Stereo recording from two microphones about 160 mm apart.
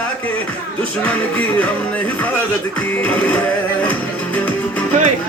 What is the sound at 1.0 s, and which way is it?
Music, 10° left (ahead or behind).